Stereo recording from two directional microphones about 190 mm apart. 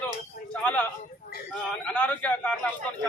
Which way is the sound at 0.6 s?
5° left (ahead or behind).